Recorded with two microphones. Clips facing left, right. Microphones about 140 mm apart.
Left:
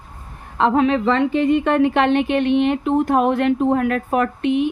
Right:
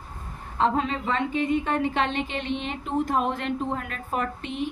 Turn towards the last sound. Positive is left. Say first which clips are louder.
# left 11 dB
turn(degrees=65)  # may be behind; listen again after turning